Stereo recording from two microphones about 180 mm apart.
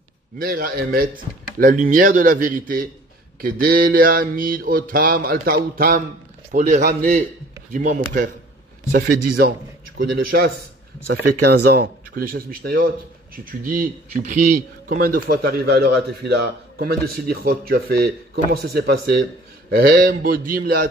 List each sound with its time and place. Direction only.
0.4 s mantra: 55° right (ahead or behind)
5.8 s speech: 55° right (ahead or behind)
6.5 s mantra: 45° right (ahead or behind)
6.8 s mantra: 55° right (ahead or behind)
8.9 s speech: 65° right (ahead or behind)